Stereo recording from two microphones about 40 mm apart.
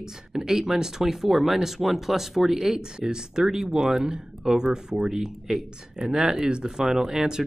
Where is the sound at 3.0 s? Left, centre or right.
Centre.